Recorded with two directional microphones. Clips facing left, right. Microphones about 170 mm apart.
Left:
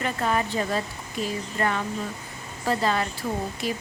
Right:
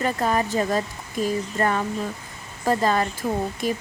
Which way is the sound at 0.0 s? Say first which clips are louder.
Right 3 dB; 40° right (ahead or behind).